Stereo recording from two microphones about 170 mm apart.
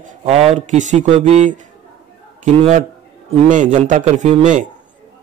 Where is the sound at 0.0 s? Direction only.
40° right (ahead or behind).